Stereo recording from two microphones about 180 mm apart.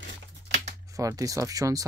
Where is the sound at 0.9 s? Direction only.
20° right (ahead or behind).